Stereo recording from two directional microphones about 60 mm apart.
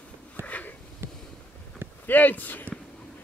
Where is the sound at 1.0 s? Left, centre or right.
Right.